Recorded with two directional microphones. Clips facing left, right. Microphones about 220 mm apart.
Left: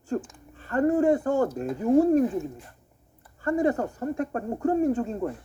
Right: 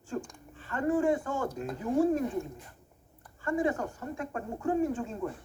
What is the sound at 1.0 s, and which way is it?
Speech, 55° left (ahead or behind).